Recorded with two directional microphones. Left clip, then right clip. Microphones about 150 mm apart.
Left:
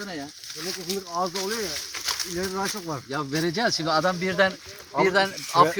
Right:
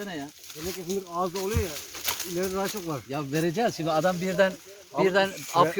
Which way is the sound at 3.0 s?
15° right (ahead or behind).